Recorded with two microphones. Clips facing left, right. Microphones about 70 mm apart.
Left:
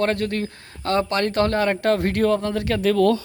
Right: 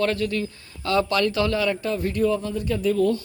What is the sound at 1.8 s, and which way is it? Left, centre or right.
Speech, left.